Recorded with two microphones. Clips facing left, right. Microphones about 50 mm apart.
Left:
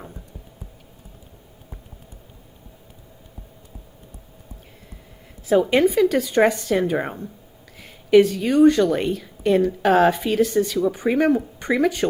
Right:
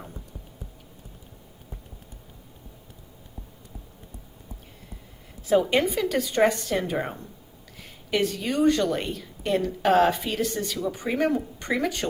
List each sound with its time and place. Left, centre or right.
5.5 s a woman's voice: centre
10.8 s a woman's voice: centre